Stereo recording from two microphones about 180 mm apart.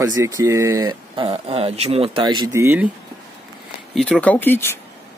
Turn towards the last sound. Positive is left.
turn(degrees=10)  # may be behind; listen again after turning